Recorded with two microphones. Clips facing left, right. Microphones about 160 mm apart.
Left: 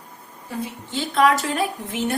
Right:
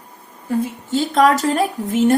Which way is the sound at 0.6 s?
45° right (ahead or behind).